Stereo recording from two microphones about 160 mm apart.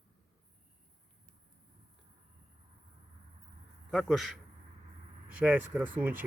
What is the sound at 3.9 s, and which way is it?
Speech, centre (ahead or behind).